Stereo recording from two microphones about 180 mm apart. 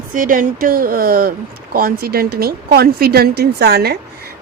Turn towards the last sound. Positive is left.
turn(degrees=-60)  # may be behind; listen again after turning